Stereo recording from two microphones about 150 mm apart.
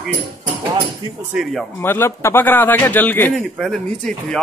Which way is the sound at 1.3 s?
5° right (ahead or behind).